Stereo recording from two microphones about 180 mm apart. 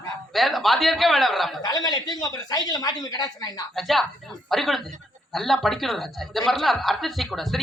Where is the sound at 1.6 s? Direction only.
20° left (ahead or behind).